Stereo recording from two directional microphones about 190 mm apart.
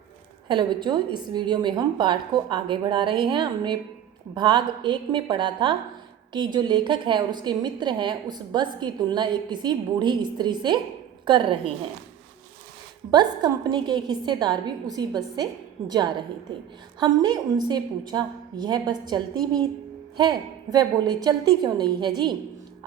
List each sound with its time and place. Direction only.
0.4 s a woman's voice: 25° right (ahead or behind)
13.1 s a woman's voice: 20° right (ahead or behind)
17.0 s a woman's voice: 20° right (ahead or behind)